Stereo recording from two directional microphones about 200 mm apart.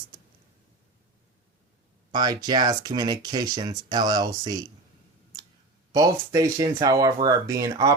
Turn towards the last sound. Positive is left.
turn(degrees=-20)  # may be behind; listen again after turning